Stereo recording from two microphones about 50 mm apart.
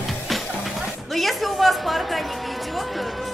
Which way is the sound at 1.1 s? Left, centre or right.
Centre.